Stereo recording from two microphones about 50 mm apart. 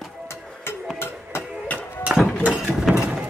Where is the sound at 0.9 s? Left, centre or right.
Left.